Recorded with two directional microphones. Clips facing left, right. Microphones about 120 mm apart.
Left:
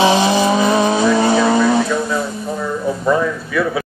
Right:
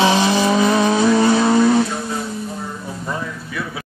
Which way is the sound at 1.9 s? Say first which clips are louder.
Left 5 dB; 90° left.